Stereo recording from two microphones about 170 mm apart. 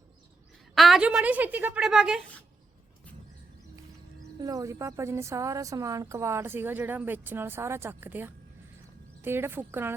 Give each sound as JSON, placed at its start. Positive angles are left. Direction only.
{"t": 0.8, "sound": "a woman's voice", "side_deg": -5}
{"t": 4.4, "sound": "speech", "side_deg": -20}